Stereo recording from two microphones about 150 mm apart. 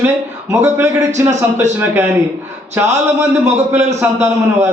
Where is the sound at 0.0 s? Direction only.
15° right (ahead or behind).